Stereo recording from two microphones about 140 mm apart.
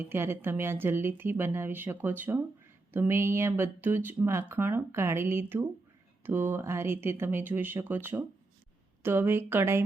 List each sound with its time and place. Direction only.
0.0 s speech: 15° right (ahead or behind)